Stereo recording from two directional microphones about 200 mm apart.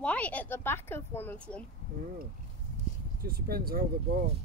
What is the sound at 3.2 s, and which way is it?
Speech, 50° right (ahead or behind).